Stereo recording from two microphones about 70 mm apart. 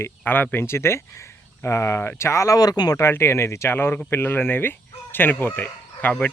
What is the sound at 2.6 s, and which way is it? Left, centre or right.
Speech, left.